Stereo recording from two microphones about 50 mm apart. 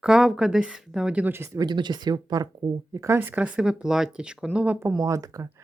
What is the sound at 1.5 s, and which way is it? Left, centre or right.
Speech, right.